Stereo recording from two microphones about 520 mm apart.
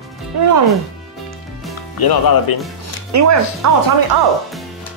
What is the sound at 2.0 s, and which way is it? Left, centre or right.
Speech, left.